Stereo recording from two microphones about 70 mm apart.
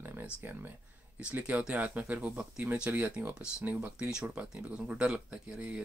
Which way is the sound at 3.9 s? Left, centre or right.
Centre.